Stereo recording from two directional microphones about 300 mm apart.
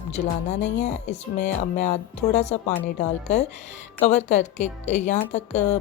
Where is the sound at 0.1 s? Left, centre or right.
Left.